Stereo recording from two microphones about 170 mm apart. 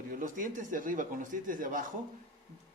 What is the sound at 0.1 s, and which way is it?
Speech, 50° right (ahead or behind).